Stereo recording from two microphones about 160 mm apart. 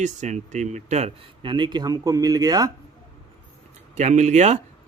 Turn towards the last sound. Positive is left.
turn(degrees=-45)  # may be behind; listen again after turning